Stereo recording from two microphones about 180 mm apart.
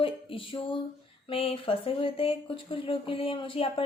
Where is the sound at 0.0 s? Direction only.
30° left (ahead or behind).